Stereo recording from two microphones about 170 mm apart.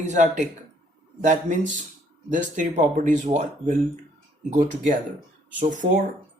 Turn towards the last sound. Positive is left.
turn(degrees=-50)  # may be behind; listen again after turning